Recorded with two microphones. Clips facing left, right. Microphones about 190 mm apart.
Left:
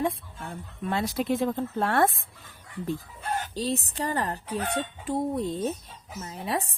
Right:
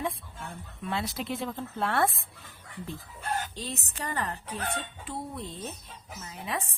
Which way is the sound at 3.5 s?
35° left (ahead or behind).